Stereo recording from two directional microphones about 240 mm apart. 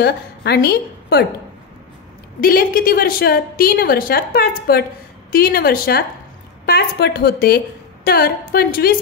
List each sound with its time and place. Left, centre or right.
0.0 s a woman's voice: left
2.4 s a woman's voice: left